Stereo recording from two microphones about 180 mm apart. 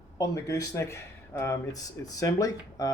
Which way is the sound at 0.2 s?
20° left (ahead or behind).